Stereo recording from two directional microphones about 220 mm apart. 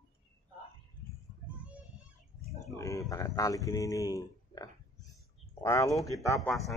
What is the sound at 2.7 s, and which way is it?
A man's voice, 15° left (ahead or behind).